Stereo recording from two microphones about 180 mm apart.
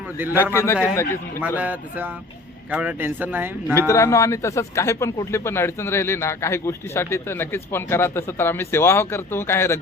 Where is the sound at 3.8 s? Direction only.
15° left (ahead or behind).